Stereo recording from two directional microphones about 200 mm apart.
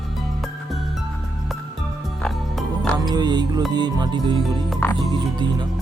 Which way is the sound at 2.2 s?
Centre (ahead or behind).